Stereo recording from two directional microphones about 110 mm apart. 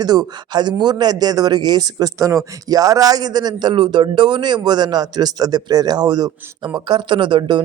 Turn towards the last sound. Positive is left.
turn(degrees=-45)  # may be behind; listen again after turning